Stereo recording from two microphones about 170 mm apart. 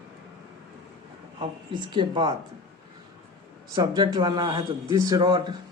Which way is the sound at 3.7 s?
25° right (ahead or behind).